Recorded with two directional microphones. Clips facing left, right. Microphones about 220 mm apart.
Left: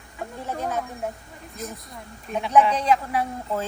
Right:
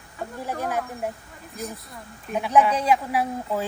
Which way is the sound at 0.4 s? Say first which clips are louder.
Even; 10° right (ahead or behind).